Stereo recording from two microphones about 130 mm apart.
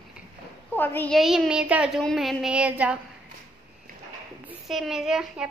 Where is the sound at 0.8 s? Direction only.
15° left (ahead or behind).